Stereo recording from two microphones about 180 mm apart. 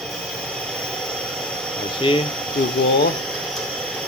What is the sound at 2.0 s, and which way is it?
Speech, 25° left (ahead or behind).